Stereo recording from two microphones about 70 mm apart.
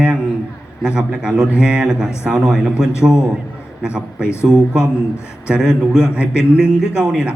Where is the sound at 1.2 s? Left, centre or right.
Centre.